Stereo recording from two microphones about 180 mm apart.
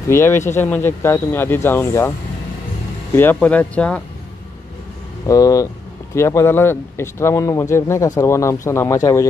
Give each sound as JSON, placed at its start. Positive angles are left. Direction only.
{"t": 0.1, "sound": "speech", "side_deg": 15}
{"t": 5.2, "sound": "speech", "side_deg": 20}